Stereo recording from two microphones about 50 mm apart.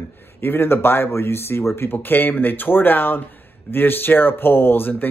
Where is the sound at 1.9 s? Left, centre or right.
Left.